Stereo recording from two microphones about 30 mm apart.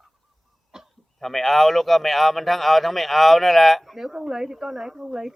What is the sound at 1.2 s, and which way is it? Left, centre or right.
A man's voice, centre.